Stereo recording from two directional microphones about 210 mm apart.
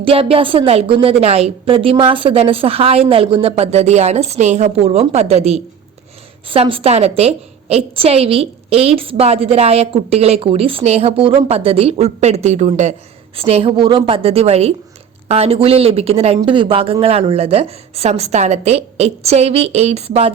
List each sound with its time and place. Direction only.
0.0 s a woman's voice: 25° right (ahead or behind)